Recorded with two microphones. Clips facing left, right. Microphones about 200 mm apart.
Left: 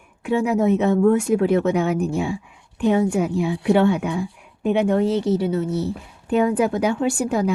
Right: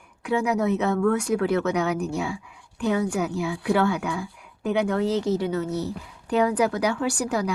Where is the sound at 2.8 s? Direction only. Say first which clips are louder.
Left 5 dB; 25° left (ahead or behind).